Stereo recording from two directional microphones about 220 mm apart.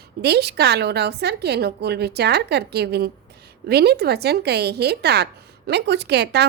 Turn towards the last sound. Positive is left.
turn(degrees=-50)  # may be behind; listen again after turning